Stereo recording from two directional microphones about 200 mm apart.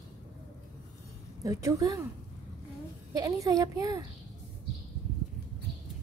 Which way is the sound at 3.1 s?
15° right (ahead or behind).